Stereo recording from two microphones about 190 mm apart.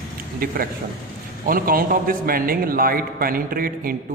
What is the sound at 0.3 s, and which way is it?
A man's voice, 50° right (ahead or behind).